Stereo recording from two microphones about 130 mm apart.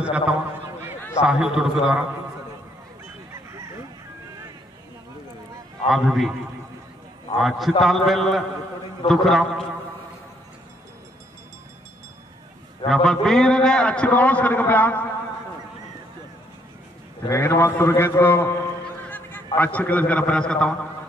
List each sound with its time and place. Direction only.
0.0 s a man's voice: 10° right (ahead or behind)
5.9 s a man's voice: centre (ahead or behind)
7.3 s a man's voice: centre (ahead or behind)
12.8 s a man's voice: 5° left (ahead or behind)
17.3 s a man's voice: 20° left (ahead or behind)